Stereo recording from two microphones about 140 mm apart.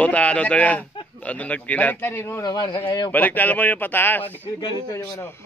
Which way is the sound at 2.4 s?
30° left (ahead or behind).